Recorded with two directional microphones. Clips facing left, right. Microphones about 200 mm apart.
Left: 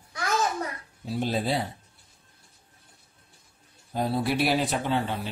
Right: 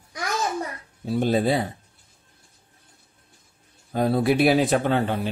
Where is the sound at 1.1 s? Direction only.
55° right (ahead or behind).